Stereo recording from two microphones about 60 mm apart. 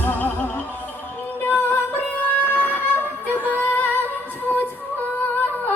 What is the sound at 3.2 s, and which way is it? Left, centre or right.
Singing, right.